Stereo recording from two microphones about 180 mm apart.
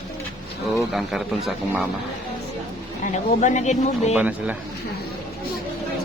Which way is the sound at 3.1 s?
45° left (ahead or behind).